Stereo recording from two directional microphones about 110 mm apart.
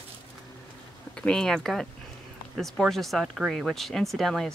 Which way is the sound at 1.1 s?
5° left (ahead or behind).